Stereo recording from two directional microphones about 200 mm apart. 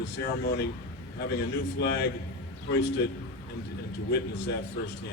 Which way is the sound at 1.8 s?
55° left (ahead or behind).